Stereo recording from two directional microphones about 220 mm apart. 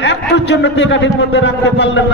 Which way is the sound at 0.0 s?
50° left (ahead or behind).